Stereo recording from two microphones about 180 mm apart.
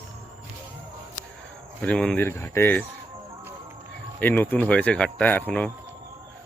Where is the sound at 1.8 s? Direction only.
5° left (ahead or behind).